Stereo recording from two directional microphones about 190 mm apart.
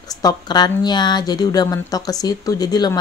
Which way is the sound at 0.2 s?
20° left (ahead or behind).